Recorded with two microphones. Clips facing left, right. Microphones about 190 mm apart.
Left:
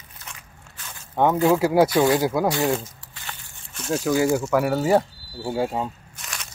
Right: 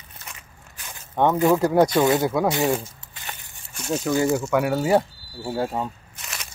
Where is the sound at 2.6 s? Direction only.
10° right (ahead or behind).